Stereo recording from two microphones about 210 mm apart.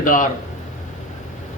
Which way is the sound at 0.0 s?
40° left (ahead or behind).